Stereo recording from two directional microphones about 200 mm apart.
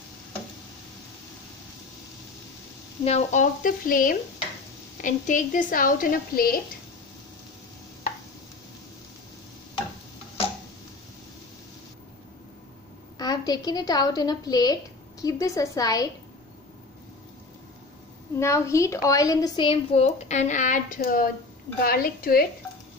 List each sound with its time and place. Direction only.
3.0 s speech: 30° left (ahead or behind)
13.2 s speech: 20° left (ahead or behind)
18.4 s speech: 15° left (ahead or behind); by 22.5 s 45° left (ahead or behind)